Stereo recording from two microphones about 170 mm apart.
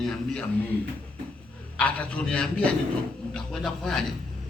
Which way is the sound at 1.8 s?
5° left (ahead or behind).